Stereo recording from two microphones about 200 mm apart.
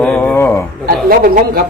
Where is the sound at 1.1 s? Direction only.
45° right (ahead or behind).